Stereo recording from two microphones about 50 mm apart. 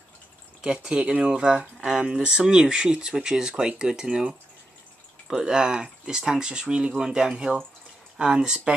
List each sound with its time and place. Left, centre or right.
0.6 s speech: centre